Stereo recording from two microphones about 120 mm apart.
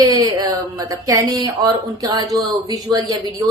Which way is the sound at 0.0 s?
30° right (ahead or behind).